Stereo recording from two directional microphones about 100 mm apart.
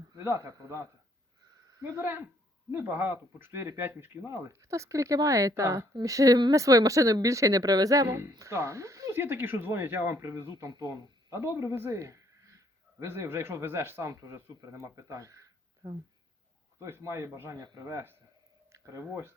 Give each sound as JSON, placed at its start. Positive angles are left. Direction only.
{"t": 0.2, "sound": "speech", "side_deg": -30}
{"t": 9.2, "sound": "speech", "side_deg": -20}
{"t": 15.8, "sound": "speech", "side_deg": -45}
{"t": 16.8, "sound": "speech", "side_deg": -30}